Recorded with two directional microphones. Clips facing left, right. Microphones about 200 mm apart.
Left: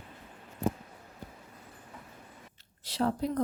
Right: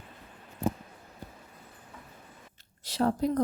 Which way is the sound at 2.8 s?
45° right (ahead or behind).